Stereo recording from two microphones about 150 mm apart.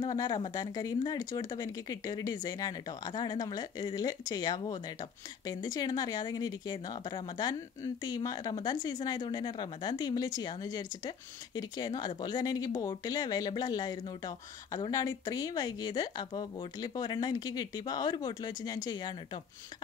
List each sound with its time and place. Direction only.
0.0 s speech: 25° left (ahead or behind)